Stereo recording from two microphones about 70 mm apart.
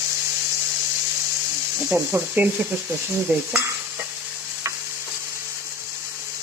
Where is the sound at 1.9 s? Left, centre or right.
Right.